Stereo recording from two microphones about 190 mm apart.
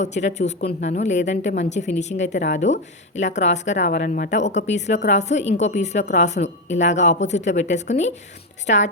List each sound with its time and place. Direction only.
0.0 s a woman's voice: 35° left (ahead or behind)